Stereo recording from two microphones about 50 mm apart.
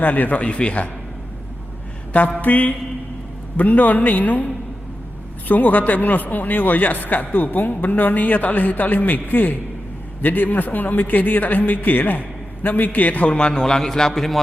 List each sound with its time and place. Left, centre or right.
0.0 s a man's voice: left
2.4 s a man's voice: left
13.3 s a man's voice: centre